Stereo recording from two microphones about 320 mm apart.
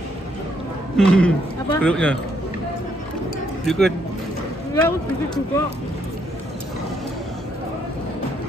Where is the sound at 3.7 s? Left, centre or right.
Centre.